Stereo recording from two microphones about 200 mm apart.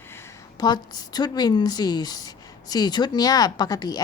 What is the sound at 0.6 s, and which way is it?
A woman's voice, 20° left (ahead or behind).